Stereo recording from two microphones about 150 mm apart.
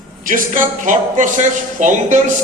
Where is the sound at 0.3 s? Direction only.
60° right (ahead or behind).